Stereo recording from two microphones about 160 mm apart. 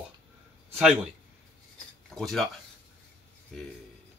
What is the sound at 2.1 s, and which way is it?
Speech, centre (ahead or behind).